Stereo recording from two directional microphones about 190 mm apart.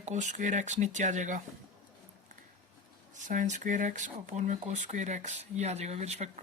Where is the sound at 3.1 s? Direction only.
40° right (ahead or behind).